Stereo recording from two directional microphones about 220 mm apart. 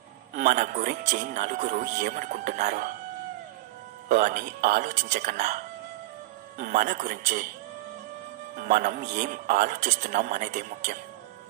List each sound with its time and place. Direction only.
0.4 s a man's voice: 35° right (ahead or behind)
4.1 s a man's voice: 40° right (ahead or behind)
6.6 s a man's voice: 35° right (ahead or behind)
8.5 s a man's voice: 40° right (ahead or behind)